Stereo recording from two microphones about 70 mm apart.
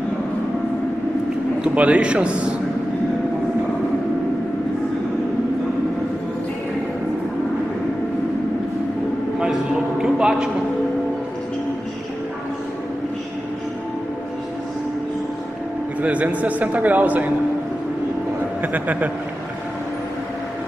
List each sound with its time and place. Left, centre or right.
1.6 s a man's voice: centre
9.4 s a sound: centre
16.0 s a man's voice: right
18.6 s a man's voice: right